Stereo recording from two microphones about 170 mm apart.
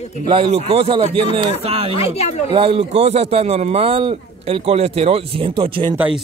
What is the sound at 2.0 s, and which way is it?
Speech, 40° left (ahead or behind).